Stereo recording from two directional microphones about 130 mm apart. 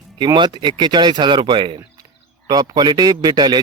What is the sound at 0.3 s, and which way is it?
A man's voice, 35° right (ahead or behind).